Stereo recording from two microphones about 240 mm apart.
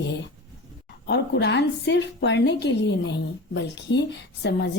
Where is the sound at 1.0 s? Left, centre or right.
Left.